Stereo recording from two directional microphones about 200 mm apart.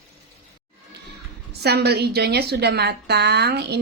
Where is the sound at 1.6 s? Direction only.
55° right (ahead or behind).